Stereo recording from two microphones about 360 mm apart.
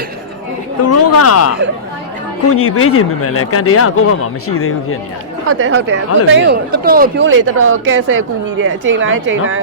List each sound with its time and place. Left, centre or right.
0.8 s speech: left
5.5 s speech: right